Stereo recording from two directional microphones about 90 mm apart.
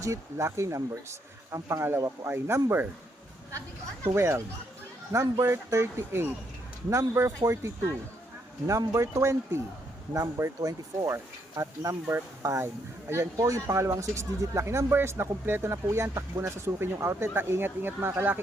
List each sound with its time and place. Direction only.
0.0 s speech: 35° right (ahead or behind)
4.0 s speech: 30° right (ahead or behind)